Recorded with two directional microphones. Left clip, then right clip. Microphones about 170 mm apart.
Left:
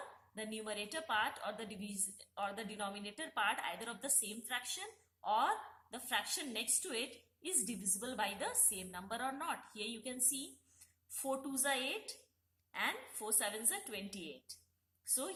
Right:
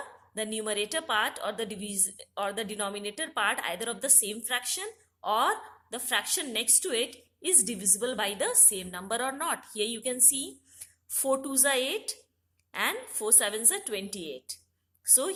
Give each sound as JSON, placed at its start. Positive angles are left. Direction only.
{"t": 0.3, "sound": "a woman's voice", "side_deg": -40}